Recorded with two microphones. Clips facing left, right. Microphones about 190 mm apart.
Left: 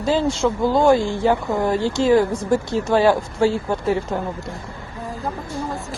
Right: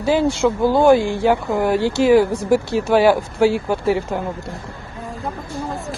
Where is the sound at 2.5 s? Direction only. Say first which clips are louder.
Right 3 dB; 70° right (ahead or behind).